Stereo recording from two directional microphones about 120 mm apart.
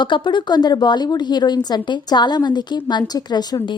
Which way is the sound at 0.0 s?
40° left (ahead or behind).